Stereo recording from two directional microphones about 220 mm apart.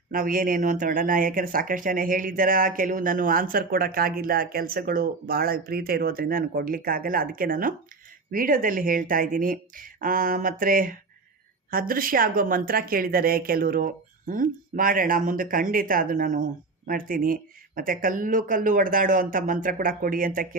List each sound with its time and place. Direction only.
0.1 s speech: 40° right (ahead or behind)